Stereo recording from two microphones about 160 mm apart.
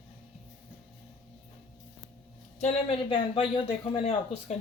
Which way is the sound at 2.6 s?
35° left (ahead or behind).